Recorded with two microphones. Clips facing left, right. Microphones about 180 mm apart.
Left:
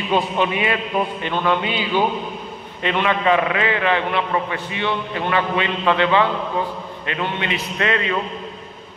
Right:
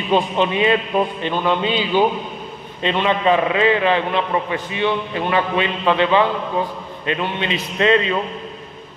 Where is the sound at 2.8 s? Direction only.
20° right (ahead or behind).